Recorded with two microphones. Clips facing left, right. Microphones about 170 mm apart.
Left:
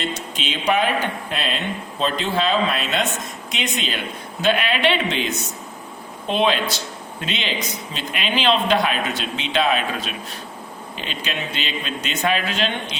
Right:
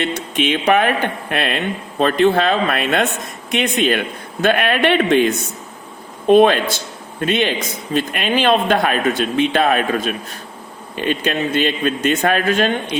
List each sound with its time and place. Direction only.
0.0 s a man's voice: 60° right (ahead or behind)